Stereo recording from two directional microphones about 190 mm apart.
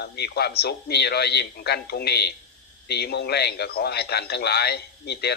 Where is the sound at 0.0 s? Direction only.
55° left (ahead or behind).